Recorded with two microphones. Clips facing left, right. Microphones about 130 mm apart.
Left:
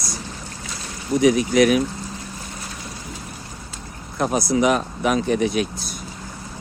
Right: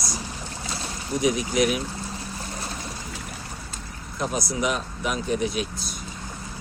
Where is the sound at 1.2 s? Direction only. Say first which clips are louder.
Left 7 dB; 65° left (ahead or behind).